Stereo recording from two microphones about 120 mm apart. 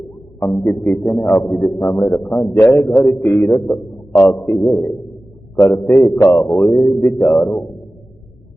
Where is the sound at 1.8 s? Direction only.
25° left (ahead or behind).